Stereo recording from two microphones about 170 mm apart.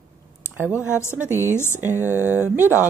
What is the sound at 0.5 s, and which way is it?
Speech, 5° right (ahead or behind).